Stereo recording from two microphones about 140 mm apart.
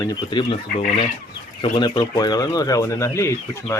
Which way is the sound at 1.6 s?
35° left (ahead or behind).